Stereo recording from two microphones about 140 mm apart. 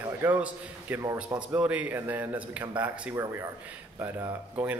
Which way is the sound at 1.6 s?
10° right (ahead or behind).